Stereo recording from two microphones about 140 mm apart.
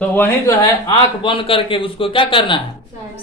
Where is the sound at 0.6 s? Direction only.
35° left (ahead or behind).